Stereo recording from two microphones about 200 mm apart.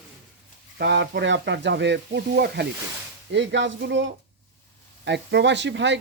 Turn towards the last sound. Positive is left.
turn(degrees=-65)  # may be behind; listen again after turning